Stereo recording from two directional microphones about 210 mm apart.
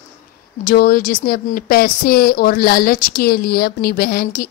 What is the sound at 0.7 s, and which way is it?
A woman's voice, 45° left (ahead or behind).